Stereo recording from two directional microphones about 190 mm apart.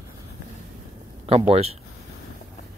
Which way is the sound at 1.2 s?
30° right (ahead or behind).